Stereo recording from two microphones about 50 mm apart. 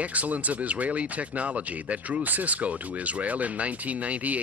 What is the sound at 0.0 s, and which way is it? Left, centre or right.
Speech, right.